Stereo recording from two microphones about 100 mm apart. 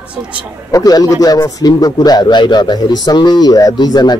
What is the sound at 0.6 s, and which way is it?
A man's voice, 35° left (ahead or behind).